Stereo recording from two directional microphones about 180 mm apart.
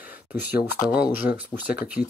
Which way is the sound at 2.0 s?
45° left (ahead or behind).